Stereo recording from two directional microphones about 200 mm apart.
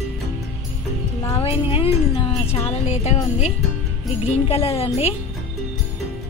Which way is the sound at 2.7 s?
30° left (ahead or behind).